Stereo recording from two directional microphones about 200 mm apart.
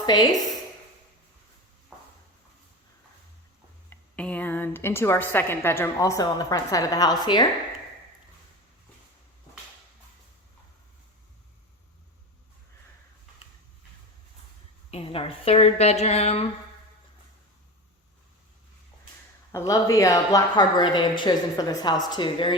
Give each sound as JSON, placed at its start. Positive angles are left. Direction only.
{"t": 0.0, "sound": "a woman's voice", "side_deg": 20}
{"t": 3.8, "sound": "a woman's voice", "side_deg": 5}
{"t": 14.8, "sound": "a woman's voice", "side_deg": 30}
{"t": 19.5, "sound": "a woman's voice", "side_deg": 15}